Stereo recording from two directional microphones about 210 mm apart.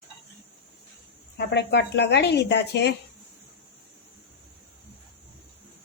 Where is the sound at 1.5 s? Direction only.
55° left (ahead or behind).